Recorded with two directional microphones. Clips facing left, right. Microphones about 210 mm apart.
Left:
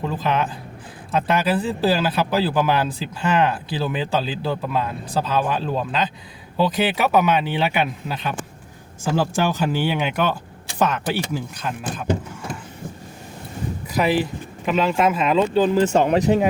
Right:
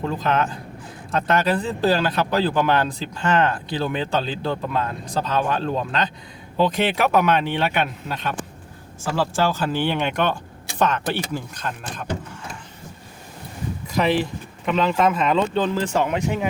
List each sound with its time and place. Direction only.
0.0 s speech: 5° left (ahead or behind)
9.1 s speech: 20° left (ahead or behind)
13.9 s speech: 5° left (ahead or behind)
15.9 s speech: 30° left (ahead or behind)